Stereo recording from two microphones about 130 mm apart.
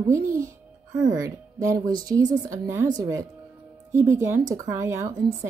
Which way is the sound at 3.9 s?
20° right (ahead or behind).